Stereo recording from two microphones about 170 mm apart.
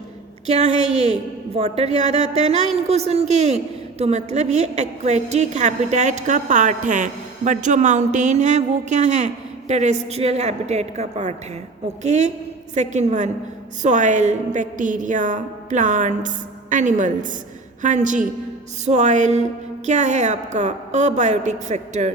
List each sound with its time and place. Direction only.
0.4 s a woman's voice: 40° right (ahead or behind)